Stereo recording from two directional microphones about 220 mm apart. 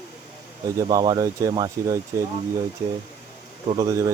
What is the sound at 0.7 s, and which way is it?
Speech, 20° right (ahead or behind).